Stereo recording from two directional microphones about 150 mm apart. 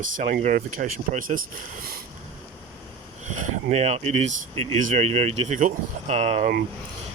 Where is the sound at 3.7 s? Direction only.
45° right (ahead or behind).